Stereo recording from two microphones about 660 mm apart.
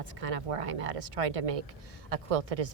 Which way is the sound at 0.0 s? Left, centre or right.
Right.